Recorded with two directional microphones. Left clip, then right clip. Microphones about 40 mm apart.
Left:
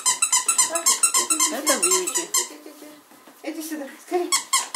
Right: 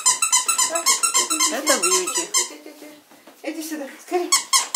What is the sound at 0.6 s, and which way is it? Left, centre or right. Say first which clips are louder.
Dog: right 2 dB; left.